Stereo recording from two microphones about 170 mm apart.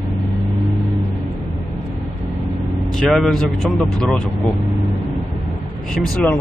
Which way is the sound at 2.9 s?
Centre (ahead or behind).